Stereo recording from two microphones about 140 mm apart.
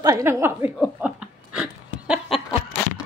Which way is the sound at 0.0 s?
20° right (ahead or behind).